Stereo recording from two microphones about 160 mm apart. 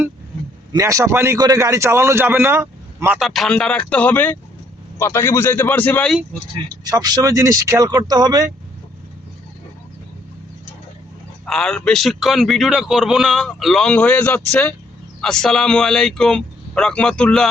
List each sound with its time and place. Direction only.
0.7 s a man's voice: 20° right (ahead or behind)
3.2 s speech: centre (ahead or behind)
6.8 s speech: 25° right (ahead or behind)
11.4 s a man's voice: 5° left (ahead or behind)